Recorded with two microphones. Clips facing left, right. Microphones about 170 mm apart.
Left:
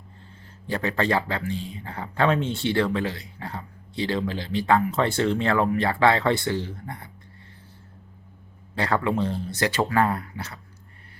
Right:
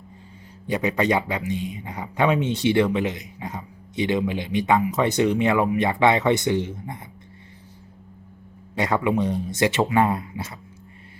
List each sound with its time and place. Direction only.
0.7 s speech: 15° right (ahead or behind)
8.7 s speech: 20° right (ahead or behind)